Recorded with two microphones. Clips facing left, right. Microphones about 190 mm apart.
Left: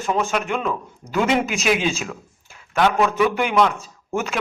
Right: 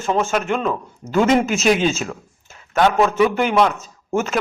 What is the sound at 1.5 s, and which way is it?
Speech, 40° right (ahead or behind).